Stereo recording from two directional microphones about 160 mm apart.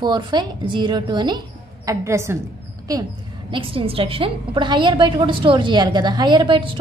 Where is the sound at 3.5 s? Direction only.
35° right (ahead or behind).